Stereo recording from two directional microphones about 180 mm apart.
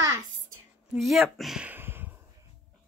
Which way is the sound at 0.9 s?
Centre (ahead or behind).